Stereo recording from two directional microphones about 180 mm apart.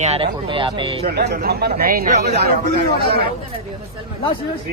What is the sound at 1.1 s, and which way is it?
Speech, 60° right (ahead or behind).